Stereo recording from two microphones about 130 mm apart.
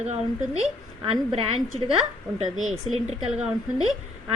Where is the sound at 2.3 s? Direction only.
70° right (ahead or behind).